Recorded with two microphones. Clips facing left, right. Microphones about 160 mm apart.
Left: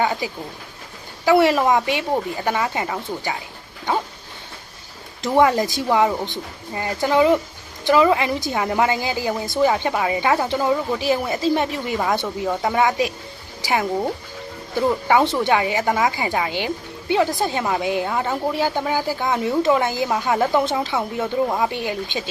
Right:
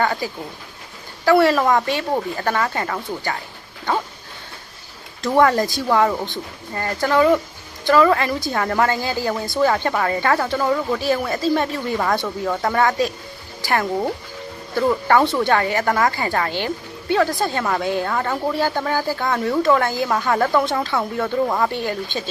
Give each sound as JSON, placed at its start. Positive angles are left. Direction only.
{"t": 0.0, "sound": "speech", "side_deg": 15}
{"t": 5.2, "sound": "speech", "side_deg": 20}
{"t": 13.6, "sound": "a sound", "side_deg": 15}
{"t": 14.8, "sound": "speech", "side_deg": 15}